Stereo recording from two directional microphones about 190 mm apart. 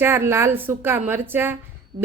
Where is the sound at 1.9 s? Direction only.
25° right (ahead or behind).